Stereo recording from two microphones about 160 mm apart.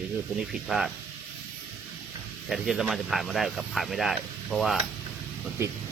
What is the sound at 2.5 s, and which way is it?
Speech, centre (ahead or behind).